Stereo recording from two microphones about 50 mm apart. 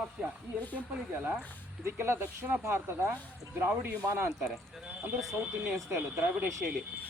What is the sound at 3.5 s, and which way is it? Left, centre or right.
Speech, right.